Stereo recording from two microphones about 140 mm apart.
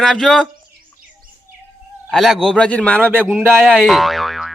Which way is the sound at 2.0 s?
Centre (ahead or behind).